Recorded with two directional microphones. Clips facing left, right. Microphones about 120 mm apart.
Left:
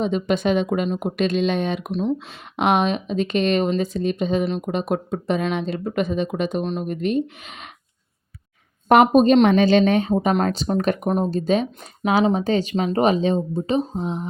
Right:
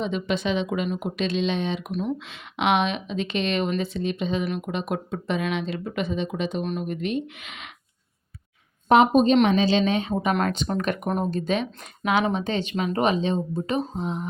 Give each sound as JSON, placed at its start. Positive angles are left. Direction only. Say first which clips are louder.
{"t": 0.0, "sound": "speech", "louder": "left 5 dB", "side_deg": 45}
{"t": 1.9, "sound": "speech", "louder": "left 5 dB", "side_deg": 25}
{"t": 2.1, "sound": "speech", "louder": "left 4 dB", "side_deg": 40}
{"t": 6.6, "sound": "speech", "louder": "left 3 dB", "side_deg": 30}
{"t": 6.8, "sound": "speech", "louder": "left 5 dB", "side_deg": 40}
{"t": 8.9, "sound": "speech", "louder": "left 3 dB", "side_deg": 55}
{"t": 10.3, "sound": "speech", "louder": "left 4 dB", "side_deg": 30}